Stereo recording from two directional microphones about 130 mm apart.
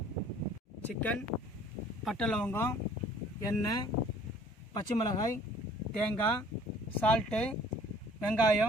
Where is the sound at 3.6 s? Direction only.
30° left (ahead or behind).